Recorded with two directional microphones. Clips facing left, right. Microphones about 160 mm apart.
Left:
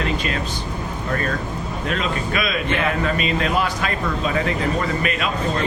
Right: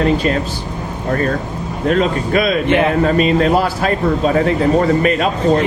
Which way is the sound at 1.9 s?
35° right (ahead or behind).